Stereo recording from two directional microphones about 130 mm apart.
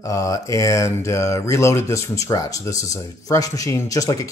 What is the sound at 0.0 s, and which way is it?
Speech, 25° left (ahead or behind).